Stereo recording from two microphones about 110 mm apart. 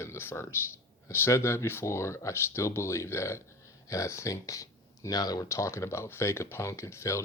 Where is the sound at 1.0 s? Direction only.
25° left (ahead or behind).